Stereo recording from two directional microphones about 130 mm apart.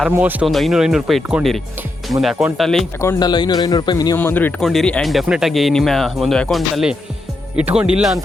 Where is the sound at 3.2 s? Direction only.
35° left (ahead or behind).